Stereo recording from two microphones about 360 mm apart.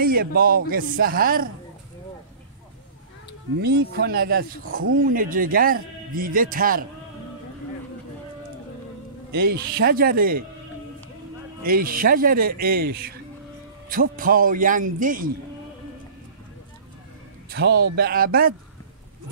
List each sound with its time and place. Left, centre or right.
0.0 s speech: right
3.6 s speech: right
9.3 s speech: right
11.6 s speech: right
17.5 s a man's voice: right